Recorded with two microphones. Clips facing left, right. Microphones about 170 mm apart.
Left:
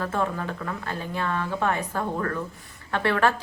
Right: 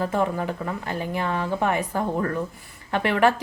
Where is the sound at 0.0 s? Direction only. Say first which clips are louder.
Right 3 dB; 15° right (ahead or behind).